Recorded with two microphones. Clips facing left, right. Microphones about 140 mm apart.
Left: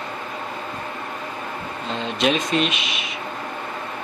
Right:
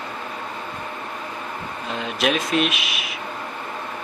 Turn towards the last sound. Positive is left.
turn(degrees=-5)  # may be behind; listen again after turning